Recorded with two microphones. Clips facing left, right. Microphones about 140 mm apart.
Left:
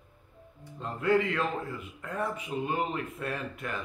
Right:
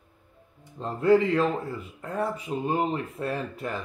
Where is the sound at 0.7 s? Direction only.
35° right (ahead or behind).